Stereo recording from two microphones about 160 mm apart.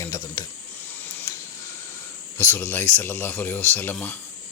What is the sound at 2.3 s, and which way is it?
Speech, 10° left (ahead or behind).